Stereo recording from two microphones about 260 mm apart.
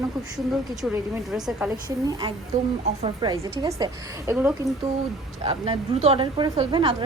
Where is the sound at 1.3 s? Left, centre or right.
Centre.